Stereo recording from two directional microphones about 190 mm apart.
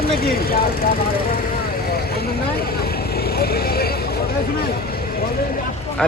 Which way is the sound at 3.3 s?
55° left (ahead or behind).